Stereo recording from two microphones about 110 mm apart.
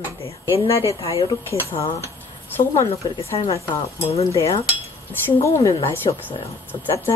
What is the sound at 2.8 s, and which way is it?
Speech, 60° left (ahead or behind).